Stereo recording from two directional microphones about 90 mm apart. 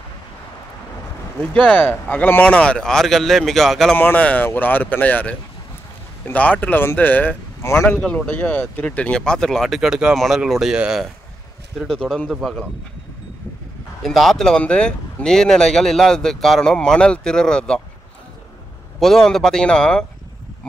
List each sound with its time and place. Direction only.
1.5 s speech: 15° left (ahead or behind)
3.9 s speech: 20° left (ahead or behind)
8.3 s speech: 15° left (ahead or behind); by 12.6 s centre (ahead or behind)
14.0 s speech: centre (ahead or behind)
18.9 s speech: 5° left (ahead or behind)